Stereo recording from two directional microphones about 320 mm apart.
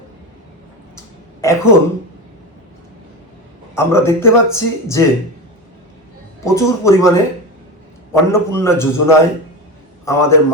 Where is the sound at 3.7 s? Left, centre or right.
Centre.